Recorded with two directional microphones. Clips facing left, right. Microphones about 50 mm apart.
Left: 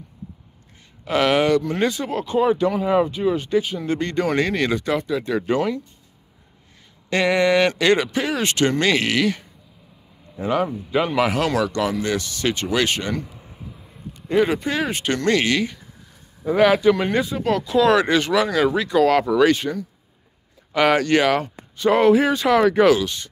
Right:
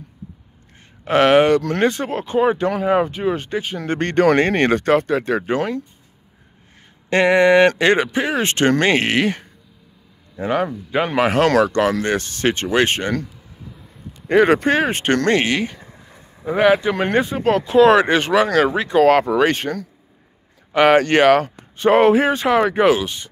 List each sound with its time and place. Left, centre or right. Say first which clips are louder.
1.0 s speech: right 5 dB; right
5.4 s speech: even; right
7.1 s speech: right 5 dB; right
13.2 s a sound: right 1 dB; centre
14.2 s speech: right 5 dB; right
14.7 s speech: right 5 dB; right
20.7 s speech: right 4 dB; right